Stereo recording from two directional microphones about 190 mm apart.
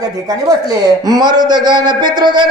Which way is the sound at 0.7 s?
20° right (ahead or behind).